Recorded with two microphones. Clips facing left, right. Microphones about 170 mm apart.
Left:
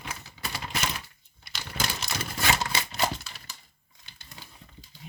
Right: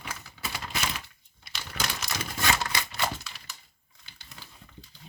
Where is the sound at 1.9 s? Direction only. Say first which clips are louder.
Left 1 dB; 30° left (ahead or behind).